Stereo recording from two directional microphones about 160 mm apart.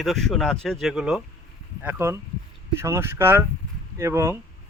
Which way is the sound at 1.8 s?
15° right (ahead or behind).